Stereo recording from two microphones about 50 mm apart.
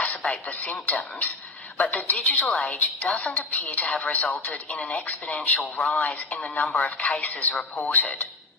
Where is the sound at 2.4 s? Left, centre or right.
Centre.